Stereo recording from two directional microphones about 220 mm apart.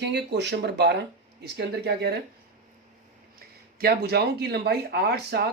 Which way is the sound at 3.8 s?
45° right (ahead or behind).